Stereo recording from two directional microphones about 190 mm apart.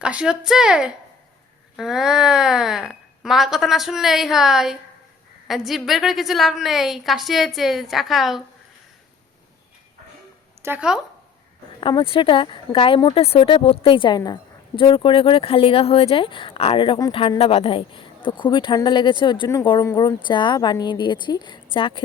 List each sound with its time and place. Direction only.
0.0 s speech: 5° right (ahead or behind)
10.6 s speech: 10° right (ahead or behind)
11.8 s speech: 25° left (ahead or behind)